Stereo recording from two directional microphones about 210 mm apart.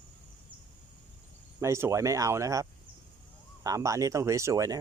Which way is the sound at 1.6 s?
15° right (ahead or behind).